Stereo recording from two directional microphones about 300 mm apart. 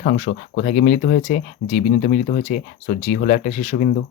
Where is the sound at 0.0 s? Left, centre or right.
Left.